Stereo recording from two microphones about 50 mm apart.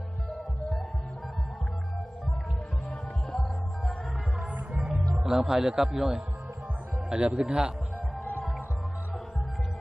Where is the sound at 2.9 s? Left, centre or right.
Centre.